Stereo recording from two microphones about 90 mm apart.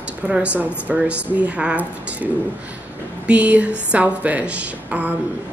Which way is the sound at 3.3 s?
15° right (ahead or behind).